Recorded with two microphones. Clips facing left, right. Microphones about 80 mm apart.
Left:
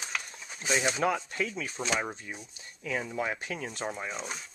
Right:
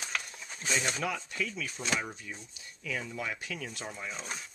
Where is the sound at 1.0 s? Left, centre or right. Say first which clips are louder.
Left 5 dB; left.